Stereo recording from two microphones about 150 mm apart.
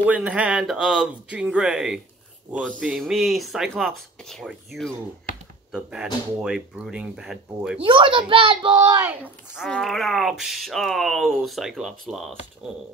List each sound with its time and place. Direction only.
0.0 s speech: 10° right (ahead or behind)
7.8 s a child's voice: 35° right (ahead or behind)
8.9 s speech: 10° right (ahead or behind)
9.7 s speech: centre (ahead or behind)